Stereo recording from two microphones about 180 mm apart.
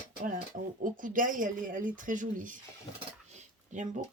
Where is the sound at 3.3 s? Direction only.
40° right (ahead or behind).